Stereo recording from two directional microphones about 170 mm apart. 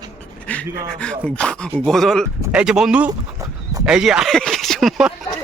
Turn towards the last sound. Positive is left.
turn(degrees=0)  # may be behind; listen again after turning